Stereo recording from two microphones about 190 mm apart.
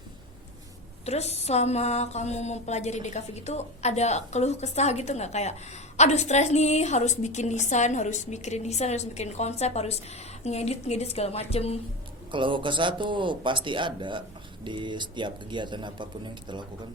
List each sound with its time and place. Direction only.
1.0 s mantra: 35° left (ahead or behind)
12.3 s speech: 25° right (ahead or behind)